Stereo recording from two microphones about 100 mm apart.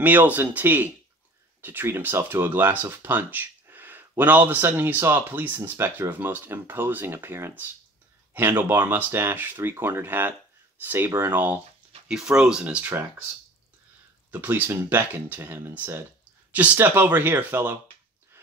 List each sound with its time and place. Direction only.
0.0 s speech: 15° right (ahead or behind)
12.1 s speech: 5° right (ahead or behind)
14.3 s speech: 20° right (ahead or behind)